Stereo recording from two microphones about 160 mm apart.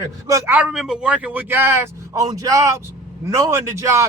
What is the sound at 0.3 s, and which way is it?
A man's voice, 15° right (ahead or behind).